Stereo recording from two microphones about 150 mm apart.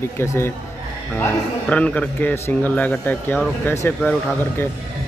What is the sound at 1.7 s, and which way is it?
A man's voice, 10° left (ahead or behind).